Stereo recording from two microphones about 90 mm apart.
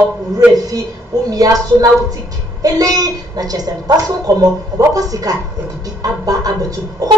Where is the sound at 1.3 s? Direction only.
45° right (ahead or behind).